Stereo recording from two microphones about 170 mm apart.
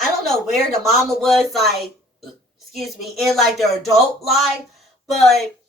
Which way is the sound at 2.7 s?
Centre (ahead or behind).